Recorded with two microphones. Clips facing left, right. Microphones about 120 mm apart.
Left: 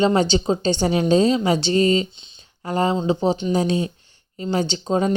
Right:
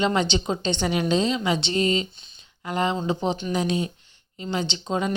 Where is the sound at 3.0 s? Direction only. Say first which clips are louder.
Left 5 dB; 30° left (ahead or behind).